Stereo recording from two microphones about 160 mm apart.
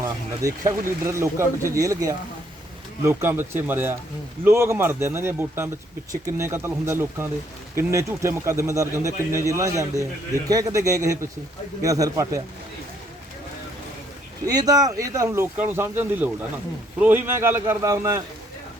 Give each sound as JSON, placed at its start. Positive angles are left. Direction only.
{"t": 0.0, "sound": "a man's voice", "side_deg": -20}
{"t": 14.4, "sound": "a man's voice", "side_deg": -25}